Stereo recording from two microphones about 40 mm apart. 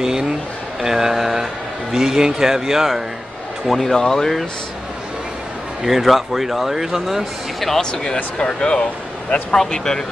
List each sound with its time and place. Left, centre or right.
0.0 s a sound: centre
0.8 s a man's voice: centre
3.6 s speech: centre
5.9 s a man's voice: centre
7.9 s speech: centre